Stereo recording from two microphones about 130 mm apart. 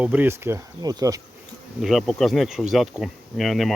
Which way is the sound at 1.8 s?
Centre (ahead or behind).